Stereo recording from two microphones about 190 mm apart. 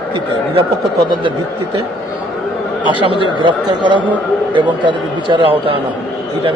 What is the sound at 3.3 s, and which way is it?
Speech, 25° right (ahead or behind).